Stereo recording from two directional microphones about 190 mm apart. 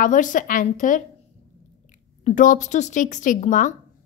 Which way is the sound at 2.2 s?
45° left (ahead or behind).